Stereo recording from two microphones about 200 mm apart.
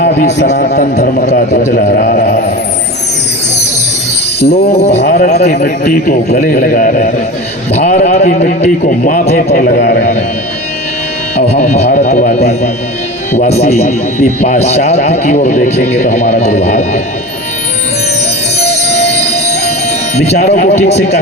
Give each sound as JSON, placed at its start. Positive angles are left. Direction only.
{"t": 0.4, "sound": "speech", "side_deg": 35}
{"t": 4.4, "sound": "speech", "side_deg": 55}
{"t": 4.8, "sound": "speech", "side_deg": 30}
{"t": 5.0, "sound": "a man's voice", "side_deg": 50}
{"t": 11.3, "sound": "speech", "side_deg": 35}
{"t": 18.6, "sound": "music", "side_deg": 35}
{"t": 20.1, "sound": "speech", "side_deg": 35}